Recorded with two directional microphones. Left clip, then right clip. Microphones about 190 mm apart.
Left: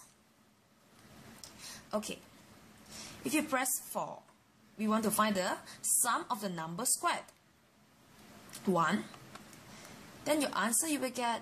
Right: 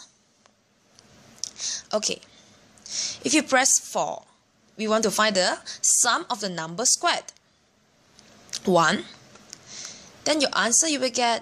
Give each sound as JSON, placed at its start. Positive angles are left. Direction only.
{"t": 1.4, "sound": "a sound", "side_deg": -30}
{"t": 2.9, "sound": "a woman's voice", "side_deg": -30}
{"t": 8.5, "sound": "speech", "side_deg": -35}
{"t": 10.2, "sound": "speech", "side_deg": -30}